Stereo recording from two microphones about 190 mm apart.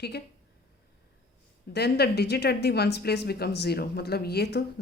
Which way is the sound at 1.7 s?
60° left (ahead or behind).